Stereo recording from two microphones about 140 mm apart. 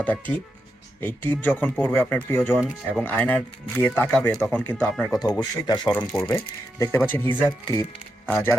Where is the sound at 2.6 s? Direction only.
5° right (ahead or behind).